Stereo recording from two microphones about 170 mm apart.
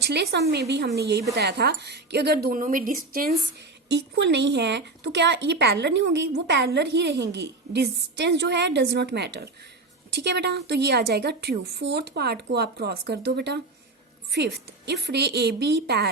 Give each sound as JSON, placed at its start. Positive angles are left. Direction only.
{"t": 0.1, "sound": "a woman's voice", "side_deg": -75}
{"t": 3.8, "sound": "a woman's voice", "side_deg": -85}
{"t": 14.8, "sound": "a woman's voice", "side_deg": -75}